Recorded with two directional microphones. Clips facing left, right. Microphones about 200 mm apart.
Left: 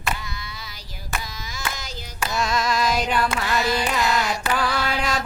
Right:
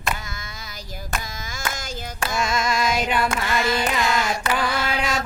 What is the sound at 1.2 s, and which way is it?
Hands, 50° right (ahead or behind).